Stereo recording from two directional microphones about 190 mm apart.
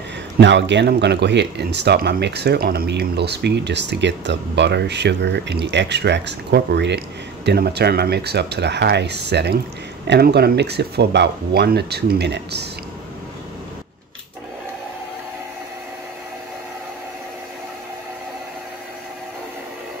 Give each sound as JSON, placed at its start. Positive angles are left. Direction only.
{"t": 0.4, "sound": "speech", "side_deg": -70}